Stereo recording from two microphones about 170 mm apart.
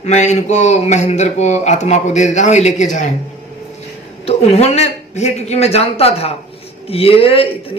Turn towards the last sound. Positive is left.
turn(degrees=35)  # may be behind; listen again after turning